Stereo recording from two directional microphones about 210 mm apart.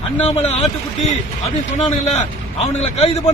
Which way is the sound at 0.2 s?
30° left (ahead or behind).